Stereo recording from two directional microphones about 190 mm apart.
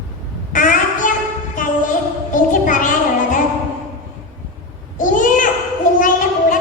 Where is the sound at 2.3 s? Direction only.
45° left (ahead or behind).